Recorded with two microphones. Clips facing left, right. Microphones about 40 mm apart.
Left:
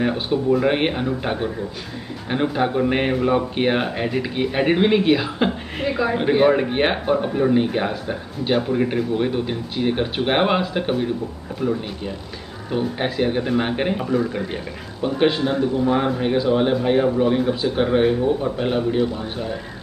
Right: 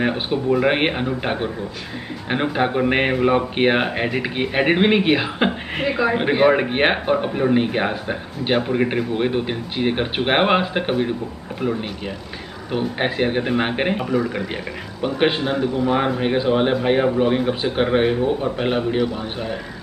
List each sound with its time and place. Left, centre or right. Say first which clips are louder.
0.0 s speech: even; right
12.7 s speech: right 1 dB; right
14.2 s speech: even; right
15.1 s speech: left 1 dB; right
15.5 s a man's voice: even; right
16.1 s speech: even; right